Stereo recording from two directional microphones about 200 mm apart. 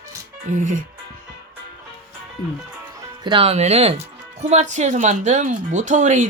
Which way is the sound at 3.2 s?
25° right (ahead or behind).